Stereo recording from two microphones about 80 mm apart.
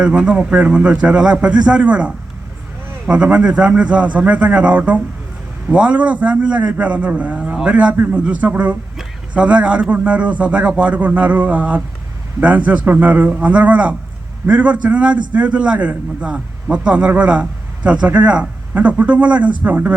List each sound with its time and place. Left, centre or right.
0.0 s a man's voice: centre